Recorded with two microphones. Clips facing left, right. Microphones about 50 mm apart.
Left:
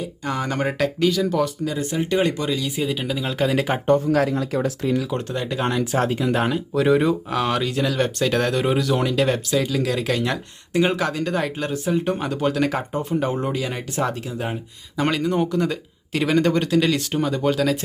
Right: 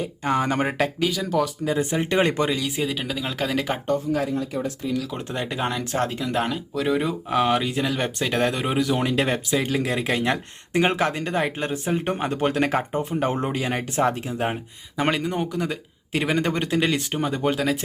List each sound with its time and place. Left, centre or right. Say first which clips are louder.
0.3 s speech: right 2 dB; right
0.9 s speech: left 3 dB; centre
1.6 s speech: right 1 dB; right
2.7 s speech: left 2 dB; centre
4.1 s speech: left 4 dB; left
5.3 s speech: left 2 dB; right
5.5 s speech: left 4 dB; centre
7.3 s speech: right 1 dB; centre; by 14.6 s right
14.9 s speech: left 3 dB; centre